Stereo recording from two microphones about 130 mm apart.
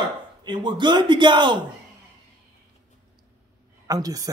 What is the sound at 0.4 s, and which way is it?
A man's voice, 35° right (ahead or behind).